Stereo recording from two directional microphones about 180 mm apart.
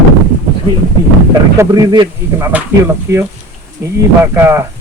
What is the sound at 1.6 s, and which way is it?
A man's voice, 20° right (ahead or behind).